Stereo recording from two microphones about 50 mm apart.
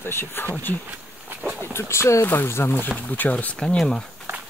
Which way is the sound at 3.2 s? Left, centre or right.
Left.